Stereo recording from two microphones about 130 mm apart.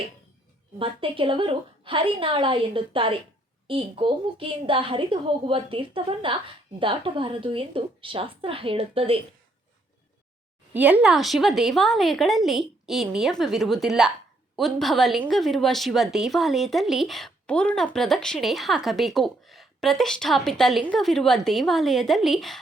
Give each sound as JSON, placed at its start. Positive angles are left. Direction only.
{"t": 0.8, "sound": "a woman's voice", "side_deg": -45}
{"t": 10.8, "sound": "speech", "side_deg": -10}